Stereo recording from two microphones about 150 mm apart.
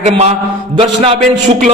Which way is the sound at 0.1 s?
45° right (ahead or behind).